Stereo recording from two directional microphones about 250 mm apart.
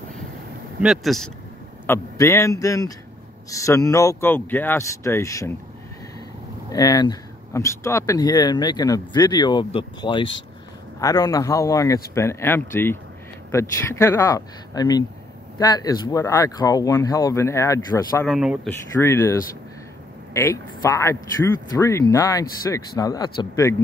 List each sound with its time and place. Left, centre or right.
0.7 s speech: centre
1.9 s speech: centre
6.7 s speech: centre
18.3 s speech: centre
18.7 s speech: centre
20.3 s speech: centre